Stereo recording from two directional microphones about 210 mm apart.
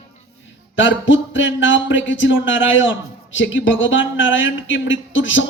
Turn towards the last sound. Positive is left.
turn(degrees=65)  # may be behind; listen again after turning